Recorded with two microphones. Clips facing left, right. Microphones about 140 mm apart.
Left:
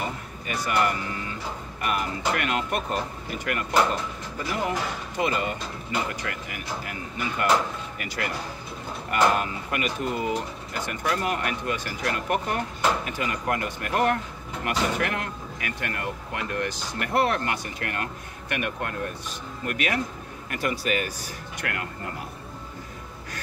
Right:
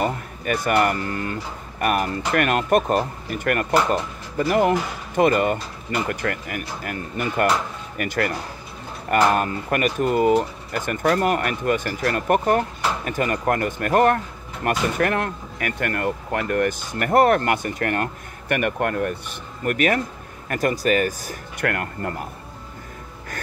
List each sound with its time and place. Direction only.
0.0 s speech: 55° right (ahead or behind)